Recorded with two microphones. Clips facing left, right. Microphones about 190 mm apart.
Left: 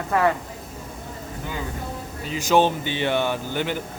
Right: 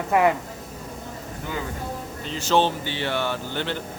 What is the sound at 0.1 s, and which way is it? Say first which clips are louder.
Speech: right 1 dB; 15° right (ahead or behind).